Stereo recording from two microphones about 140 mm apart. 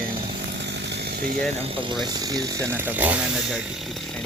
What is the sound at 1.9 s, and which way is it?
Speech, 30° right (ahead or behind).